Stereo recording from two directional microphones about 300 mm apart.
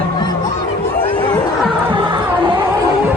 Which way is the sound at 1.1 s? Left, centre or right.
Centre.